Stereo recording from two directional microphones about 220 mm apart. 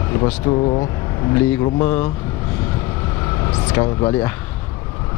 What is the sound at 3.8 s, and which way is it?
Speech, 20° left (ahead or behind).